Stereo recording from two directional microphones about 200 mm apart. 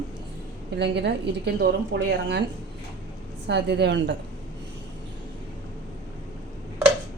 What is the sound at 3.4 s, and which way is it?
Speech, 60° right (ahead or behind).